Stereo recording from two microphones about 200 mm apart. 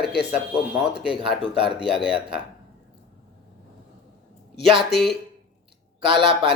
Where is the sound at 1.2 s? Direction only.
Centre (ahead or behind).